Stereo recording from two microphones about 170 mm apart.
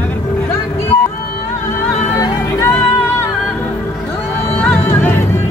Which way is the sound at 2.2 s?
15° left (ahead or behind).